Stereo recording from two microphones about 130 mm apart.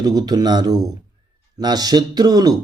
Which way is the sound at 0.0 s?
30° right (ahead or behind).